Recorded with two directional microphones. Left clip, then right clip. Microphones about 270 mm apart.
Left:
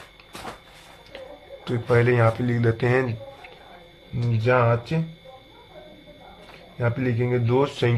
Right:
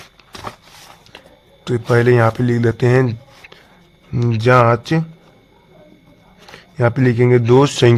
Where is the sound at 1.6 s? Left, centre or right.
Right.